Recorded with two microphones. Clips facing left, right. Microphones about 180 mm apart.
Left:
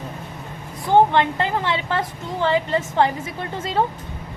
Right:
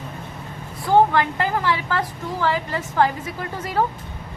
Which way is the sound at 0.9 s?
25° left (ahead or behind).